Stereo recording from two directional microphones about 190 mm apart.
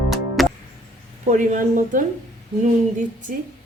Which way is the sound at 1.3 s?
45° right (ahead or behind).